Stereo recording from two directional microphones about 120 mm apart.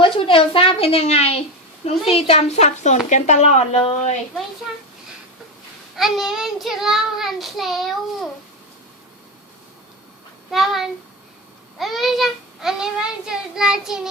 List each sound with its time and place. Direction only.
0.0 s a woman's voice: 45° left (ahead or behind); by 3.0 s 70° left (ahead or behind)
3.1 s a woman's voice: 85° left; by 3.9 s 55° left (ahead or behind)
3.9 s a woman's voice: 75° left (ahead or behind)
6.0 s child singing: centre (ahead or behind)
10.5 s child singing: centre (ahead or behind)